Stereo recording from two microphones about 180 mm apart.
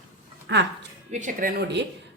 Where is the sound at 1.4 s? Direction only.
50° right (ahead or behind).